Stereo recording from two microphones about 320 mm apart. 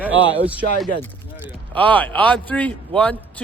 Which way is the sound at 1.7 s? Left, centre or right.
Centre.